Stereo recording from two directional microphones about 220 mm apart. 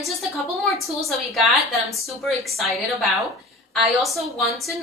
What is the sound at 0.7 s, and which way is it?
Speech, centre (ahead or behind).